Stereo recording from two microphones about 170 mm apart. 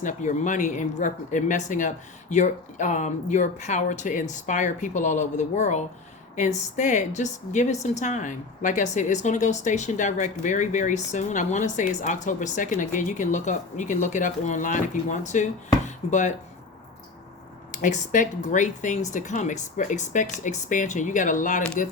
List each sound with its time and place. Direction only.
0.0 s a woman's voice: 50° left (ahead or behind)
17.7 s a woman's voice: 50° left (ahead or behind)